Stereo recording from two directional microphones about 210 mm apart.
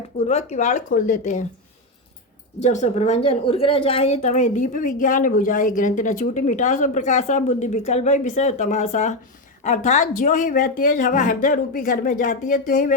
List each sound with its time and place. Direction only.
0.3 s a woman's voice: 30° left (ahead or behind)
2.6 s a woman's voice: 35° left (ahead or behind)